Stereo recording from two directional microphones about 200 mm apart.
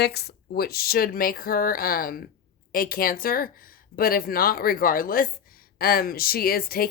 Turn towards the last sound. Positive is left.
turn(degrees=50)  # may be behind; listen again after turning